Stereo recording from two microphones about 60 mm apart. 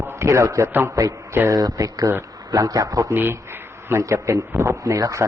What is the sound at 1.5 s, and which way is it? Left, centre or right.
Speech, right.